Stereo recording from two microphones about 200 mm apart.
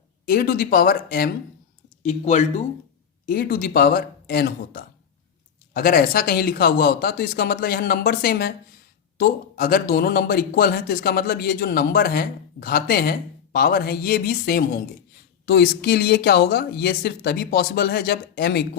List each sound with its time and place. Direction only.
0.3 s a man's voice: 45° left (ahead or behind)
2.0 s speech: 35° left (ahead or behind)
3.2 s a man's voice: 45° left (ahead or behind)